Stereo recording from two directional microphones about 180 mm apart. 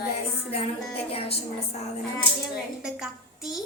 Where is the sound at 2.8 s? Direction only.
5° right (ahead or behind).